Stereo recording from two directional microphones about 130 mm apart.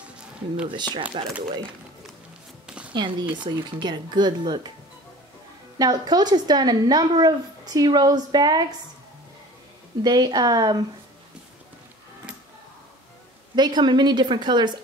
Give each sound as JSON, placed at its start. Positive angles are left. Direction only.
{"t": 1.2, "sound": "speech", "side_deg": -45}
{"t": 2.9, "sound": "a woman's voice", "side_deg": -35}
{"t": 5.8, "sound": "a woman's voice", "side_deg": -30}
{"t": 10.0, "sound": "a woman's voice", "side_deg": -30}
{"t": 13.6, "sound": "a woman's voice", "side_deg": -35}